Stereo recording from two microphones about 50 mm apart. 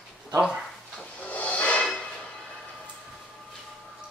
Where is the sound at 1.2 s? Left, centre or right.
Left.